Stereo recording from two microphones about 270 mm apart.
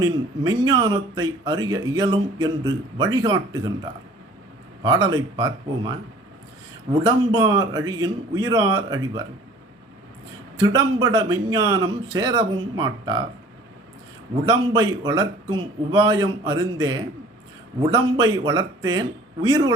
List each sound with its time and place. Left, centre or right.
0.7 s speech: centre
4.8 s speech: centre
10.6 s speech: centre
14.4 s speech: centre